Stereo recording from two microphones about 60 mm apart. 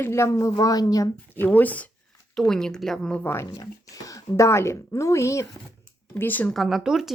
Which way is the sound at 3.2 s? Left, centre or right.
Left.